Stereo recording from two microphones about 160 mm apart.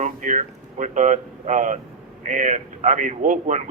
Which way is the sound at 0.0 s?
50° right (ahead or behind).